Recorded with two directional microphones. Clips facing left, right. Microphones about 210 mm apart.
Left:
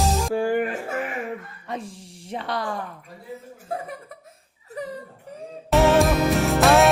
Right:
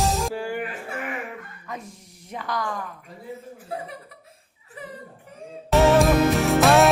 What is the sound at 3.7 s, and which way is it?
Speech, 45° left (ahead or behind).